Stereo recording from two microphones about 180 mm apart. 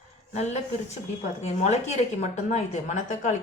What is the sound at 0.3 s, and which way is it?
A woman's voice, 40° left (ahead or behind).